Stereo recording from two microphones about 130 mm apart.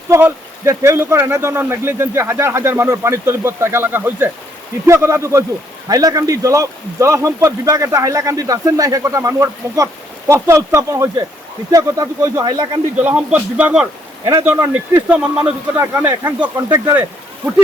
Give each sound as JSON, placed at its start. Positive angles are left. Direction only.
{"t": 0.1, "sound": "a man's voice", "side_deg": -20}
{"t": 13.0, "sound": "speech", "side_deg": -10}
{"t": 15.8, "sound": "speech", "side_deg": -20}